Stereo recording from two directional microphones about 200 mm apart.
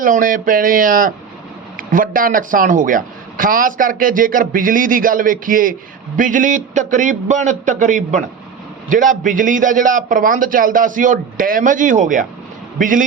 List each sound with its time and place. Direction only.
0.0 s a man's voice: 45° right (ahead or behind)